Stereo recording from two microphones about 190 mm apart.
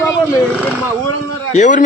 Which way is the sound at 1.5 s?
40° left (ahead or behind).